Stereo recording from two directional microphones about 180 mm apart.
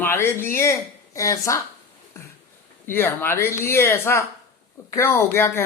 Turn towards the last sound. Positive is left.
turn(degrees=10)  # may be behind; listen again after turning